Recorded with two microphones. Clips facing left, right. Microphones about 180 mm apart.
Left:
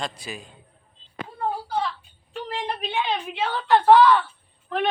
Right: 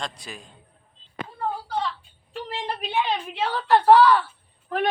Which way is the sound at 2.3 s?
5° right (ahead or behind).